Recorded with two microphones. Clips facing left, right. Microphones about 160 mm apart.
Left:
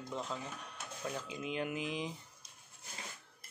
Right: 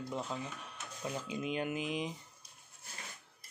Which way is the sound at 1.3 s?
20° right (ahead or behind).